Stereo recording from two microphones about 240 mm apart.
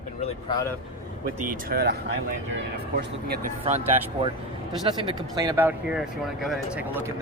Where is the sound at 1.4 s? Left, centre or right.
Right.